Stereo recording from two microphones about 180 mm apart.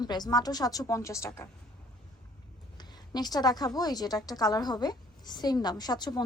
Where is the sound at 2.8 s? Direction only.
20° left (ahead or behind).